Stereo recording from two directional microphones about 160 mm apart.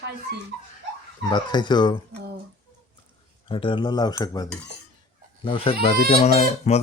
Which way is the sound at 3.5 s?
30° left (ahead or behind).